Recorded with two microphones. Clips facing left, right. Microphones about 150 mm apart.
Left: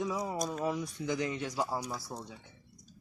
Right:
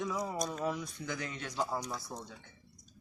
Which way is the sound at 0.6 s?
15° left (ahead or behind).